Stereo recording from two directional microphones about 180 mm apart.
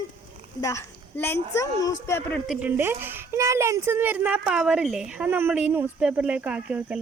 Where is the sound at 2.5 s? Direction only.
10° right (ahead or behind).